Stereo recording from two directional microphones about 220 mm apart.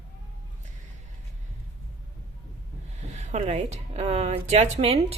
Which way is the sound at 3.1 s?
30° right (ahead or behind).